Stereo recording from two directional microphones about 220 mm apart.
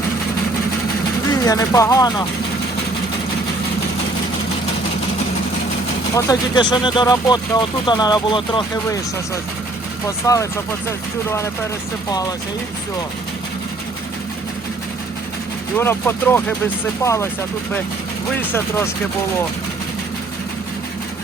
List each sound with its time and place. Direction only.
1.3 s speech: 15° left (ahead or behind)
6.1 s speech: 15° left (ahead or behind)
15.8 s speech: 10° left (ahead or behind)
18.3 s speech: 10° left (ahead or behind)